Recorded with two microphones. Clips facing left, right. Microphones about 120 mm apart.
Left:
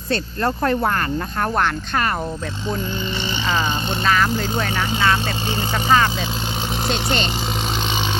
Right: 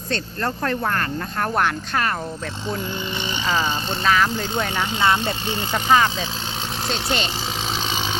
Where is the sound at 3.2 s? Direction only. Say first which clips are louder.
Even; 5° right (ahead or behind).